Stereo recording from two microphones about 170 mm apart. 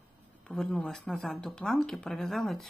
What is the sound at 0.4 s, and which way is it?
A woman's voice, 5° left (ahead or behind).